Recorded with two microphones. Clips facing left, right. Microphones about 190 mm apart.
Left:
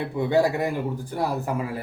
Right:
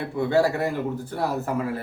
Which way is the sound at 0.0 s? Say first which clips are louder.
Even; 15° left (ahead or behind).